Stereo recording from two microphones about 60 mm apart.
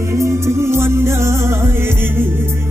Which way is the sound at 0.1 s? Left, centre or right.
Right.